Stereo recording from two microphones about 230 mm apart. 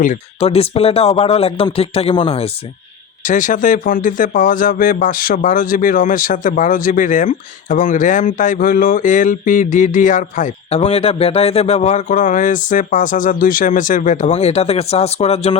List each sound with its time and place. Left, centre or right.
0.0 s speech: left